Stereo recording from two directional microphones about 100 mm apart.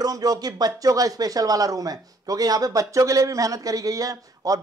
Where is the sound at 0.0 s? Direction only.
40° right (ahead or behind).